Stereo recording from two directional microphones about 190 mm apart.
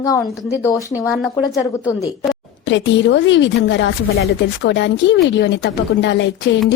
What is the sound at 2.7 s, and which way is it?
A woman's voice, 70° left (ahead or behind).